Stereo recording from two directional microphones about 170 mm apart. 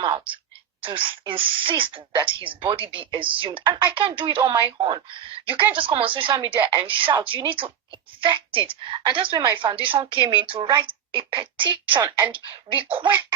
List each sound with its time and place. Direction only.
0.0 s a woman's voice: 30° right (ahead or behind)
12.0 s a woman's voice: 10° right (ahead or behind)
12.6 s a woman's voice: 30° right (ahead or behind)